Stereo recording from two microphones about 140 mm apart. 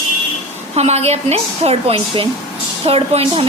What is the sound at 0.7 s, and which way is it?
A woman's voice, 50° right (ahead or behind).